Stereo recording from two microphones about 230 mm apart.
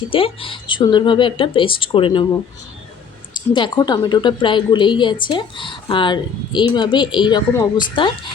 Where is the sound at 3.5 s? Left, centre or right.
Centre.